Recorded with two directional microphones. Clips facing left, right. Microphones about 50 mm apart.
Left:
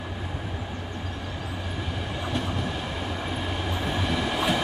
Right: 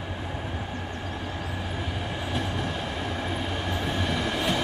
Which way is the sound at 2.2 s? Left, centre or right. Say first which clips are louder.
Left 1 dB; centre.